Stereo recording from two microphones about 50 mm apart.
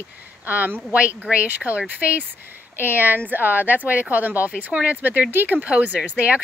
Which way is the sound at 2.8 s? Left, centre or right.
Right.